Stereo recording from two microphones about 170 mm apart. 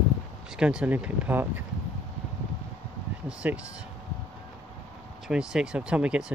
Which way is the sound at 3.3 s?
5° right (ahead or behind).